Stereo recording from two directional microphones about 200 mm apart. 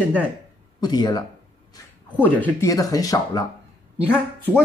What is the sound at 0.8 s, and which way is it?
Speech, 20° left (ahead or behind).